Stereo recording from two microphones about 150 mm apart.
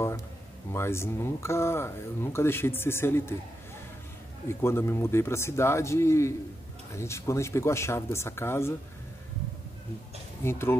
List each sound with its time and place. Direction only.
0.7 s speech: 15° left (ahead or behind)
4.5 s speech: 15° left (ahead or behind)
10.4 s speech: 15° left (ahead or behind)